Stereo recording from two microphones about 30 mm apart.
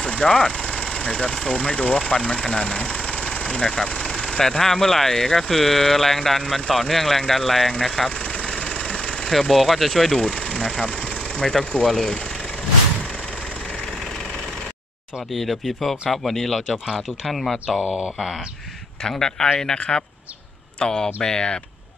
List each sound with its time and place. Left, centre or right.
0.2 s speech: left
2.9 s engine: left
3.7 s speech: left; by 8.1 s centre
8.6 s engine: left
9.3 s speech: centre
10.1 s speech: centre
15.8 s speech: centre
17.7 s speech: right
19.0 s speech: centre